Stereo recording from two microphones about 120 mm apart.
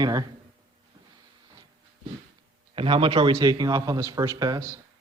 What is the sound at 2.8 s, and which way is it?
Speech, 45° right (ahead or behind).